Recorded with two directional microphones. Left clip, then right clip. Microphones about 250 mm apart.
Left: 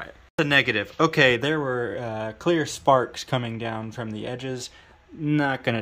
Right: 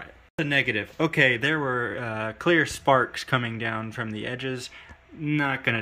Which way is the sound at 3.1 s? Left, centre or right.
Centre.